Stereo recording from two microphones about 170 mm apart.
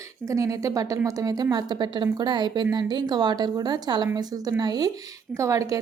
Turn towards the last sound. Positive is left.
turn(degrees=-20)  # may be behind; listen again after turning